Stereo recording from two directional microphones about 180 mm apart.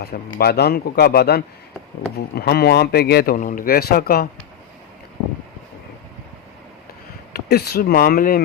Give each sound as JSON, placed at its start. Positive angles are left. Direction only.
{"t": 0.0, "sound": "speech", "side_deg": 60}
{"t": 7.3, "sound": "speech", "side_deg": 60}